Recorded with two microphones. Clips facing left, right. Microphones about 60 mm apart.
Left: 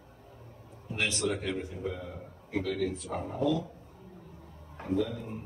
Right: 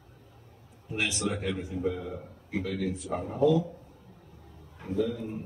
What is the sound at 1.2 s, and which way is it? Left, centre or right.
Speech, right.